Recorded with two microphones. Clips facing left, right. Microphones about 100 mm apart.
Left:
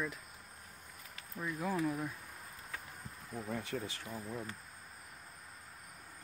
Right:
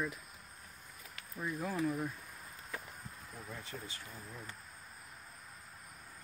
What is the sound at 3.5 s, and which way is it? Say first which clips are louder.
Speech: left 8 dB; 65° left (ahead or behind).